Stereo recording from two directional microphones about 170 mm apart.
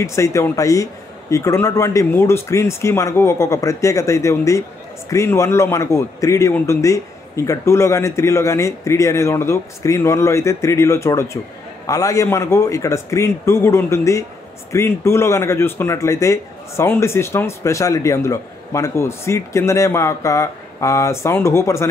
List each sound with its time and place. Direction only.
0.0 s speech: 15° left (ahead or behind)